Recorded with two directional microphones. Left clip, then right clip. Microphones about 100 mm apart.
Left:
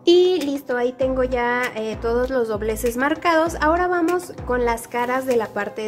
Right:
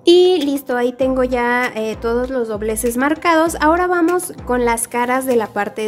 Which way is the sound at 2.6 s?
30° right (ahead or behind).